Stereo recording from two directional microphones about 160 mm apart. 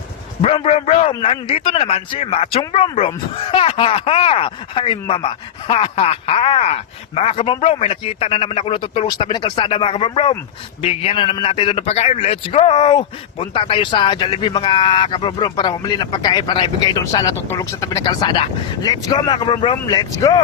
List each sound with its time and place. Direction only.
0.4 s speech: 40° left (ahead or behind)